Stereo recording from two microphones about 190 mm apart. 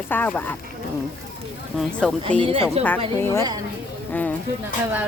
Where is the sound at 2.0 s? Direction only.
5° left (ahead or behind).